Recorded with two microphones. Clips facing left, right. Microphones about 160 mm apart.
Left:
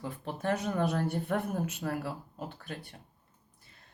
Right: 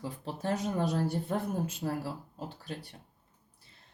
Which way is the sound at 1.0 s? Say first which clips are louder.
Even; 30° right (ahead or behind).